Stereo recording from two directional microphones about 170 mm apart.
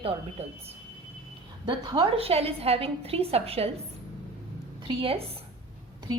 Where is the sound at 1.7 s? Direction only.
35° right (ahead or behind).